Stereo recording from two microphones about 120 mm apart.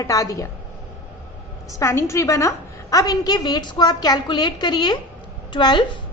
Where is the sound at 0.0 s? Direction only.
30° left (ahead or behind).